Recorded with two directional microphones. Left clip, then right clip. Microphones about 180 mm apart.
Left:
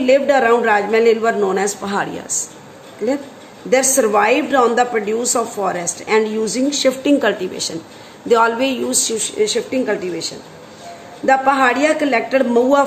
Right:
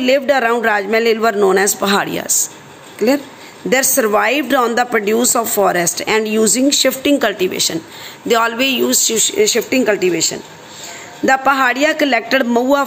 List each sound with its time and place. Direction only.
0.0 s a woman's voice: 35° right (ahead or behind)
2.0 s speech: 20° right (ahead or behind)
3.7 s a woman's voice: 30° right (ahead or behind)
7.0 s a man's voice: 10° right (ahead or behind)
9.2 s a woman's voice: 30° right (ahead or behind)